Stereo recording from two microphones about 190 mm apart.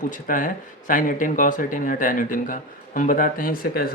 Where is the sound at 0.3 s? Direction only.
45° left (ahead or behind).